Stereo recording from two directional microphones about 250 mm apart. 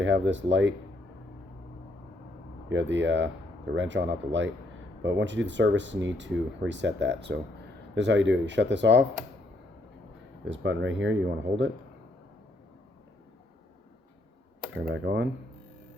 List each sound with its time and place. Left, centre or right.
0.0 s speech: right
2.6 s speech: right
10.4 s speech: right
14.8 s speech: right